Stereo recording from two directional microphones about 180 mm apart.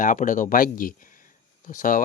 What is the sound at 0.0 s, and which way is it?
Speech, 45° left (ahead or behind).